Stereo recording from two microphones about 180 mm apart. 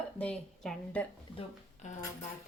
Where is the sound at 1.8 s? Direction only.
40° left (ahead or behind).